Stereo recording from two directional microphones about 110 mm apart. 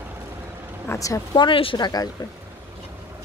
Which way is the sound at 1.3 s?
50° left (ahead or behind).